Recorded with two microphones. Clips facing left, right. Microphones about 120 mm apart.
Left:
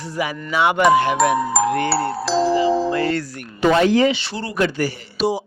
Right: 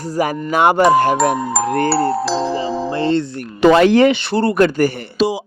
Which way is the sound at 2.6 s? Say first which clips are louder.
Left 2 dB; 30° right (ahead or behind).